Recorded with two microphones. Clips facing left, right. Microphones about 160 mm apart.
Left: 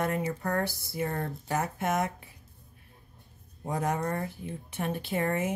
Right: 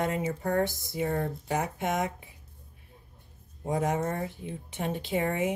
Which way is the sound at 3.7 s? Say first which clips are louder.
Right 2 dB; 20° right (ahead or behind).